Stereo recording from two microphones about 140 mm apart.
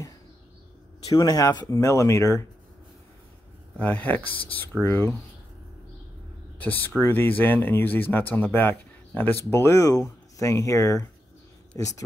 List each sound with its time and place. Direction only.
1.0 s speech: 25° left (ahead or behind)
3.7 s speech: 10° left (ahead or behind)
6.6 s speech: 15° left (ahead or behind)